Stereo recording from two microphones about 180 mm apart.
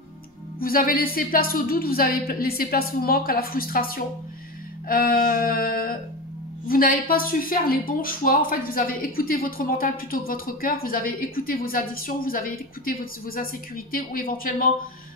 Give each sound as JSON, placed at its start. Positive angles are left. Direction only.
{"t": 0.6, "sound": "a woman's voice", "side_deg": 50}